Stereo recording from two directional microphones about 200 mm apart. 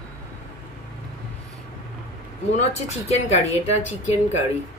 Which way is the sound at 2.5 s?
30° left (ahead or behind).